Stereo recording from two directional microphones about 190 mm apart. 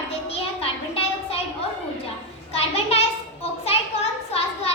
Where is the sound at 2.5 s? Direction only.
35° left (ahead or behind).